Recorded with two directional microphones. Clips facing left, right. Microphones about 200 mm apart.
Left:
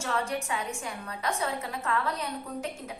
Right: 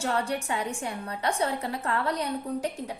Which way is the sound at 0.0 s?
35° right (ahead or behind).